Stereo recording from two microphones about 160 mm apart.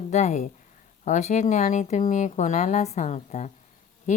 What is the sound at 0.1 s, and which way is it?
Speech, 45° left (ahead or behind).